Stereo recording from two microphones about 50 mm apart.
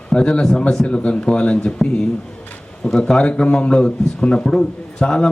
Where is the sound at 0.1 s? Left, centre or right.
Centre.